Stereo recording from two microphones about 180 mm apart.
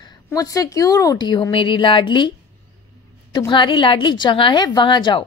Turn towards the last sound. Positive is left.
turn(degrees=25)  # may be behind; listen again after turning